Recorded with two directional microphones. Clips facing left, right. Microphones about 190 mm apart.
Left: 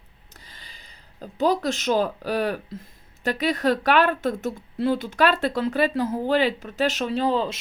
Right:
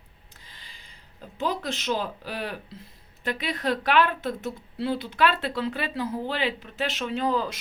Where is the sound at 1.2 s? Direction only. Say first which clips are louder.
Left 7 dB; 40° left (ahead or behind).